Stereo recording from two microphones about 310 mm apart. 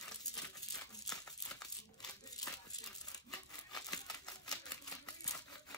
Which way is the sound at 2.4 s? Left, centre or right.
Centre.